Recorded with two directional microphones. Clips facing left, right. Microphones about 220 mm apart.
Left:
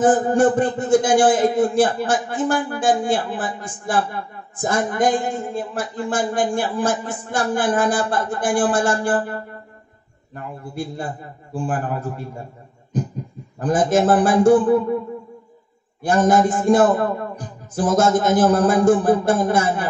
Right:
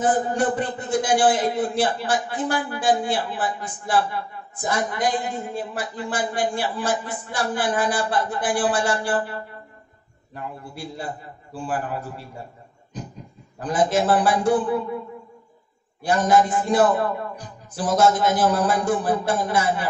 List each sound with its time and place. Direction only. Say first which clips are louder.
0.0 s a man's voice: left 6 dB; 50° left (ahead or behind)
12.9 s a sound: left 11 dB; 50° left (ahead or behind)
13.6 s a man's voice: left 4 dB; 50° left (ahead or behind)
16.0 s a man's voice: left 3 dB; 50° left (ahead or behind)